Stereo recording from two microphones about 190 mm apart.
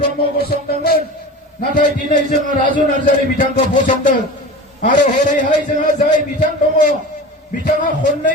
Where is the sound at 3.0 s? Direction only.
45° left (ahead or behind).